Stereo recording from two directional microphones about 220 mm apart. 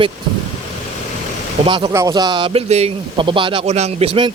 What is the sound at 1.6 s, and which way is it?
A man's voice, 20° right (ahead or behind).